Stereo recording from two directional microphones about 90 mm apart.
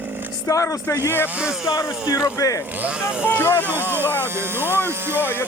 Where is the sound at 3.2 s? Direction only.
25° left (ahead or behind).